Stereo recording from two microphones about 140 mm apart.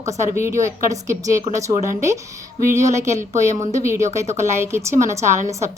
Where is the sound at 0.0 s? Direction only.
20° right (ahead or behind).